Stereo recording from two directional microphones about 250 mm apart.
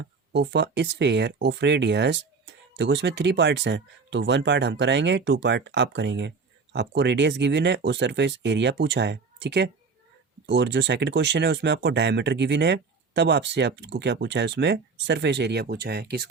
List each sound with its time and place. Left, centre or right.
0.0 s speech: right